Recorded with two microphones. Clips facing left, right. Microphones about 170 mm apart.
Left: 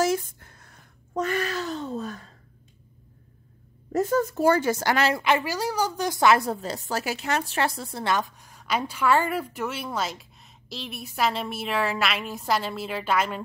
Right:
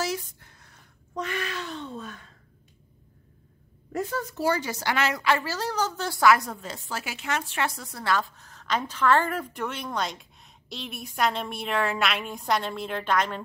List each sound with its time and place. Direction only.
0.0 s a sound: 50° left (ahead or behind)
3.9 s a woman's voice: 45° left (ahead or behind)
5.2 s a woman's voice: 15° left (ahead or behind)